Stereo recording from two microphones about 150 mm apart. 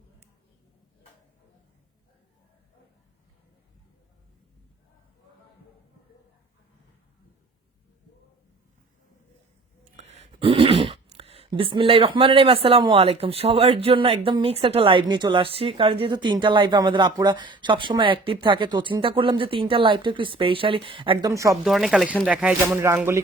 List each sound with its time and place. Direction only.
10.0 s speech: 50° right (ahead or behind)
21.2 s speech: 20° right (ahead or behind)
21.6 s speech: centre (ahead or behind); by 23.2 s 15° right (ahead or behind)